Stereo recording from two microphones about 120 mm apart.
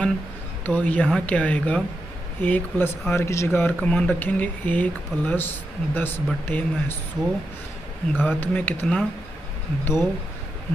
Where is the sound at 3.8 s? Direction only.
10° left (ahead or behind).